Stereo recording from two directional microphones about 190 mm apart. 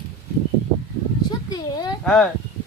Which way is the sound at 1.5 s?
20° left (ahead or behind).